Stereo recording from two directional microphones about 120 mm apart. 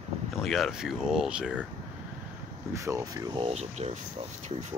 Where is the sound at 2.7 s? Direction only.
25° right (ahead or behind).